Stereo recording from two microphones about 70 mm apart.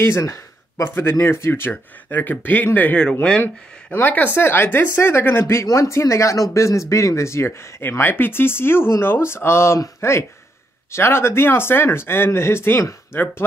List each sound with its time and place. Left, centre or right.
0.0 s speech: left
0.8 s speech: left
3.0 s speech: centre
3.4 s speech: left